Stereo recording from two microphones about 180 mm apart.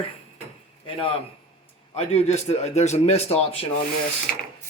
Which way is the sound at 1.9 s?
35° left (ahead or behind).